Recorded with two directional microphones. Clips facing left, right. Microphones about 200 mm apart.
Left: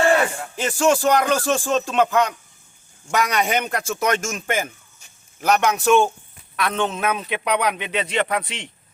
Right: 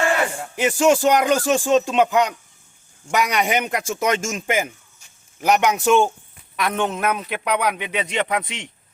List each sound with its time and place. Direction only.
0.5 s a man's voice: 15° right (ahead or behind)